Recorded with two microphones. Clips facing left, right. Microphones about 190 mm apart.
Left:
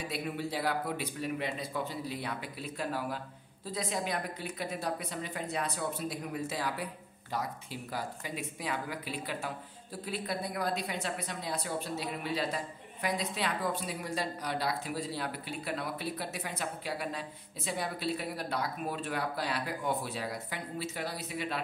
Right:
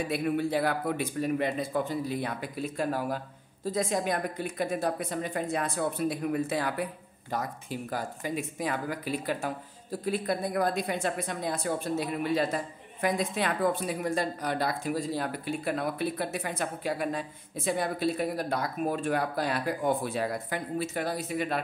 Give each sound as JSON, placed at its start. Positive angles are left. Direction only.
{"t": 0.1, "sound": "speech", "side_deg": -55}